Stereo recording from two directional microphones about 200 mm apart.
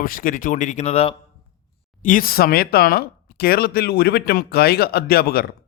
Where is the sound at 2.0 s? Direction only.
40° left (ahead or behind).